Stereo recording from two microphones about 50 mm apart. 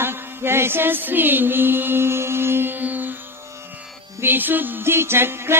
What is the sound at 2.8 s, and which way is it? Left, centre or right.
Music, right.